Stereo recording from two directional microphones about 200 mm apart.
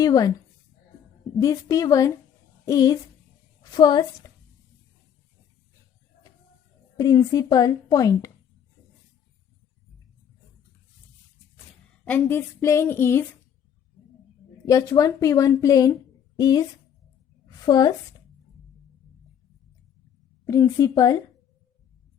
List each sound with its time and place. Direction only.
0.0 s a woman's voice: 20° left (ahead or behind)
1.4 s a woman's voice: 15° left (ahead or behind)
6.9 s a woman's voice: 20° left (ahead or behind)
12.0 s a woman's voice: 10° left (ahead or behind)
14.7 s a woman's voice: 15° left (ahead or behind)
17.7 s a woman's voice: 20° left (ahead or behind)
20.4 s a woman's voice: 15° left (ahead or behind)